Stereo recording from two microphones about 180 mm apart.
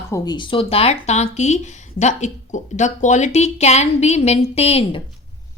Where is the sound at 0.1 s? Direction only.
25° left (ahead or behind).